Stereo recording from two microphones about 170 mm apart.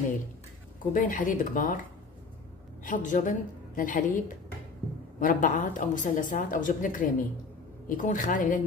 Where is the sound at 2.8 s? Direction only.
50° left (ahead or behind).